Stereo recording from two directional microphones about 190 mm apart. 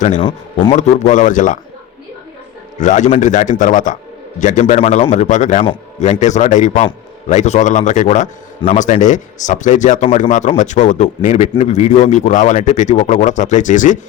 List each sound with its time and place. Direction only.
0.2 s a man's voice: 25° left (ahead or behind)
0.8 s a man's voice: 40° left (ahead or behind)
2.7 s a man's voice: 40° left (ahead or behind)